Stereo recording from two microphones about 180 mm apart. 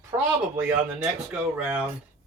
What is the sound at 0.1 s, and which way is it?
Speech, 20° right (ahead or behind).